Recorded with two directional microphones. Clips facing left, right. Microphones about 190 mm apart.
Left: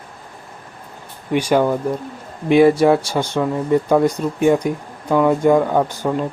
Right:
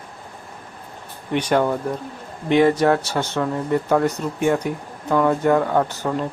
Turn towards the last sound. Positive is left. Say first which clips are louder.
# left 2 dB
turn(degrees=10)  # may be behind; listen again after turning